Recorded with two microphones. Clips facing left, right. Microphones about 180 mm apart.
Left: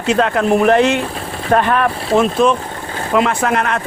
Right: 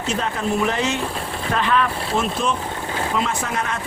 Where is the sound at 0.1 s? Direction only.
75° left (ahead or behind).